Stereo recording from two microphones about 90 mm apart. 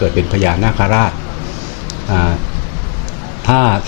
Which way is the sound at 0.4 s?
20° left (ahead or behind).